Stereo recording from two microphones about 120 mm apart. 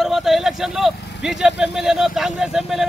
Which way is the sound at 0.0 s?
Centre (ahead or behind).